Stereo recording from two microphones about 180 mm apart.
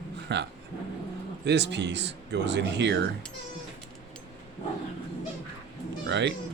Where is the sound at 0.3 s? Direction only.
75° right (ahead or behind).